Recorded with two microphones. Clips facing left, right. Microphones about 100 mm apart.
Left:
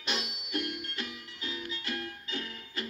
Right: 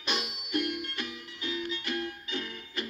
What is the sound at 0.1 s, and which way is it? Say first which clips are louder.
Music: right 2 dB; 15° right (ahead or behind).